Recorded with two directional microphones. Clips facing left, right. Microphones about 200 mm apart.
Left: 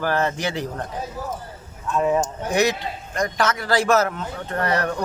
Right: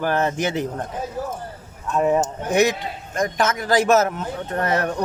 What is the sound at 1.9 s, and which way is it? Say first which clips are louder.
Speech: right 1 dB; 20° right (ahead or behind).